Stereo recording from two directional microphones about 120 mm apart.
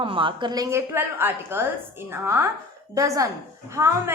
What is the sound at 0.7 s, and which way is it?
A woman's voice, 20° right (ahead or behind).